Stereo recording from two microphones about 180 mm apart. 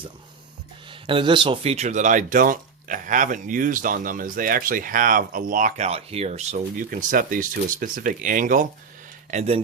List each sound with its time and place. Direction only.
0.9 s speech: 30° right (ahead or behind); by 8.6 s 45° right (ahead or behind)
9.3 s speech: 35° right (ahead or behind)